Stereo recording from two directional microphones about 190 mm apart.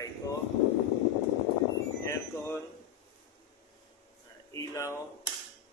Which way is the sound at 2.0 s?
15° left (ahead or behind).